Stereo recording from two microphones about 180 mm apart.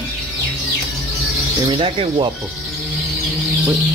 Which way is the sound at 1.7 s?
30° right (ahead or behind).